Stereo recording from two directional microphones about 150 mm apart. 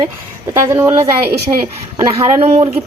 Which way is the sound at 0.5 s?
15° right (ahead or behind).